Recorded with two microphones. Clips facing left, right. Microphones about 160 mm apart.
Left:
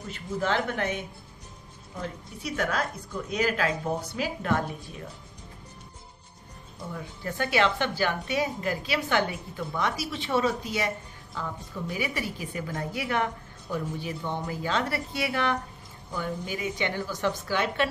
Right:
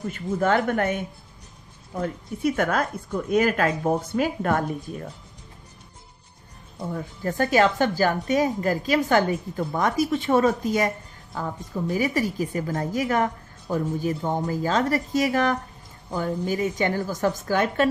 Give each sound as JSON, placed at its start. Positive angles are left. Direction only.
{"t": 0.1, "sound": "a woman's voice", "side_deg": -50}
{"t": 6.9, "sound": "a woman's voice", "side_deg": -45}